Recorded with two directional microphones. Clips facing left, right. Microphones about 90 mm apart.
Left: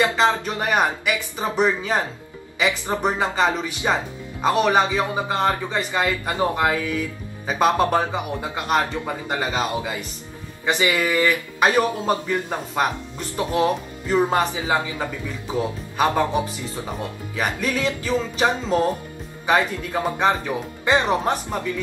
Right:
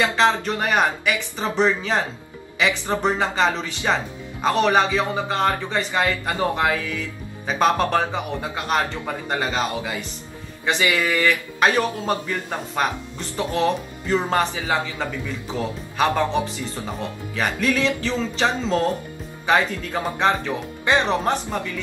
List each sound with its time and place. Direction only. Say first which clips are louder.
0.0 s speech: even; 10° left (ahead or behind)